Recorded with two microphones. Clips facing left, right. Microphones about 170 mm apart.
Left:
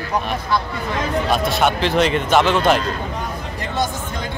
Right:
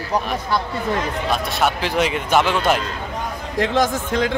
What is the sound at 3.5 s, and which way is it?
Speech, 90° right.